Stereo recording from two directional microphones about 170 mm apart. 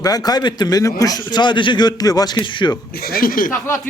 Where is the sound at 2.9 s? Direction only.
60° left (ahead or behind).